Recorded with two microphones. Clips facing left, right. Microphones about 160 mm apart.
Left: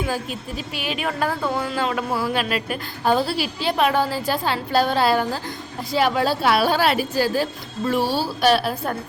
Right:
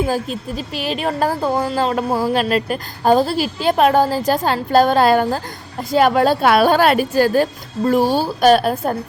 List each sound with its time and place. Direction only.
0.0 s a woman's voice: 35° right (ahead or behind)